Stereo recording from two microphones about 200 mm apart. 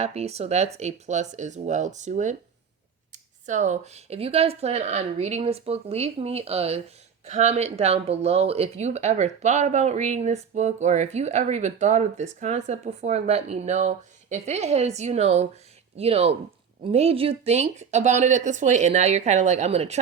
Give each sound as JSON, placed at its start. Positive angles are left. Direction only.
{"t": 0.0, "sound": "speech", "side_deg": -30}